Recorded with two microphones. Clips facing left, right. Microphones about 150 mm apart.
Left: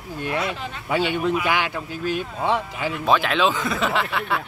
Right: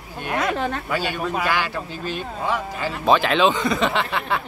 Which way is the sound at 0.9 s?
25° left (ahead or behind).